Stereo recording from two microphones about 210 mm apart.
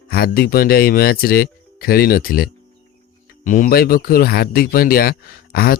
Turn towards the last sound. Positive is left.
turn(degrees=45)  # may be behind; listen again after turning